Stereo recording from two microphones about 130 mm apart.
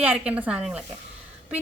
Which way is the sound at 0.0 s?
10° right (ahead or behind).